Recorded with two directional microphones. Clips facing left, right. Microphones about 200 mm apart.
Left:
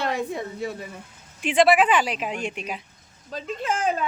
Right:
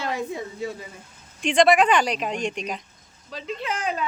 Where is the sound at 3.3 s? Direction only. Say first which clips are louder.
Left 2 dB; 45° left (ahead or behind).